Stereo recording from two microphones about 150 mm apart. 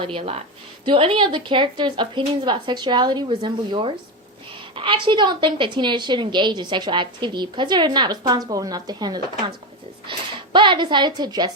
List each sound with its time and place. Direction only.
0.0 s a woman's voice: 40° right (ahead or behind)